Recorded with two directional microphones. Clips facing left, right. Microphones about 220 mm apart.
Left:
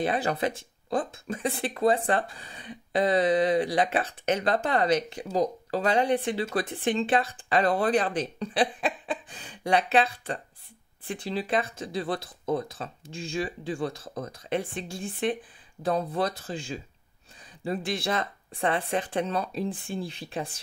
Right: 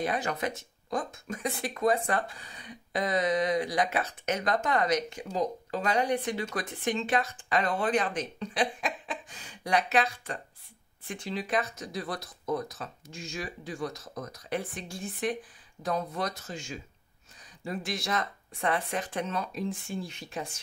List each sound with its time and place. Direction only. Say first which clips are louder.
0.0 s speech: left 4 dB; 30° left (ahead or behind)